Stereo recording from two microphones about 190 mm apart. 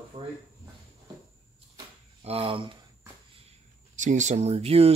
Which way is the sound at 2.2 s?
30° right (ahead or behind).